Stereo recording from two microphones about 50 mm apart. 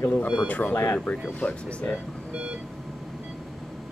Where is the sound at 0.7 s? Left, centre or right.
Left.